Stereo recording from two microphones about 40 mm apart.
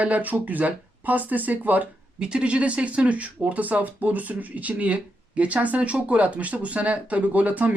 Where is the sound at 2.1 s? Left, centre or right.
Right.